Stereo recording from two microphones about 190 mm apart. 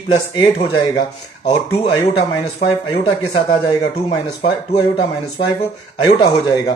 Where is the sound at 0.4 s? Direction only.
30° left (ahead or behind).